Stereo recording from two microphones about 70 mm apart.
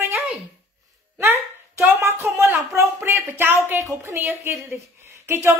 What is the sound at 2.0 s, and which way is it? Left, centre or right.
A man's voice, right.